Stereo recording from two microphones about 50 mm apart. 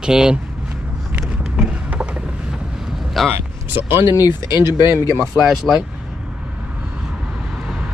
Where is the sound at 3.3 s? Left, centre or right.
Right.